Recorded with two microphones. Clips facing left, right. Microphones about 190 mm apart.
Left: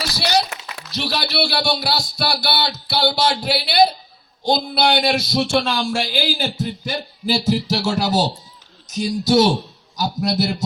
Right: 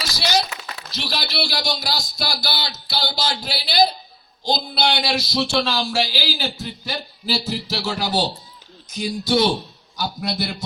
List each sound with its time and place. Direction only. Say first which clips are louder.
0.0 s run: left 3 dB; 60° left (ahead or behind)
0.9 s speech: left 5 dB; 60° left (ahead or behind); by 10.5 s 45° left (ahead or behind)